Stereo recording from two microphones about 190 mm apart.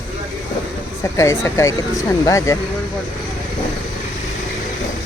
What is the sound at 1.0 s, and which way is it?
Speech, 15° left (ahead or behind).